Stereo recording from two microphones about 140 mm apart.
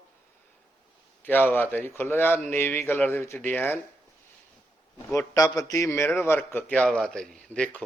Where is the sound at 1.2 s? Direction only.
15° left (ahead or behind).